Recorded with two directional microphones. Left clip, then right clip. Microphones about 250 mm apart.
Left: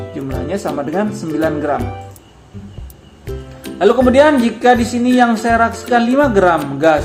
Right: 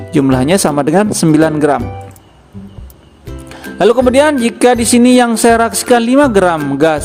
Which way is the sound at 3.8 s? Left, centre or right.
Right.